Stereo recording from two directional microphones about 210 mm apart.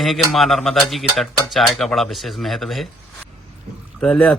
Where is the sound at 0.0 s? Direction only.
Centre (ahead or behind).